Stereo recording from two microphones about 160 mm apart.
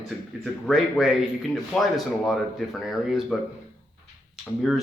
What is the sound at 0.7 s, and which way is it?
A man's voice, centre (ahead or behind).